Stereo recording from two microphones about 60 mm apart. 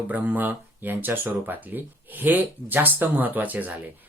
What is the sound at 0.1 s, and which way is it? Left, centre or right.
Speech, right.